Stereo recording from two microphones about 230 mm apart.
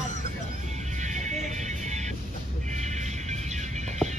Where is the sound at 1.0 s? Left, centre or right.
Right.